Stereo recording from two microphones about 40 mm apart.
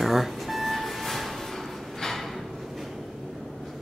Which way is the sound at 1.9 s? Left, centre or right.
Centre.